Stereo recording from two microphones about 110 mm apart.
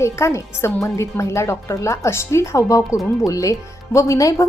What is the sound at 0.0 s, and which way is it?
A woman's voice, 25° left (ahead or behind).